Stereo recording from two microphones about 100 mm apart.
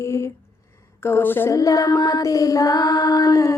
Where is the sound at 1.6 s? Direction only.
35° left (ahead or behind).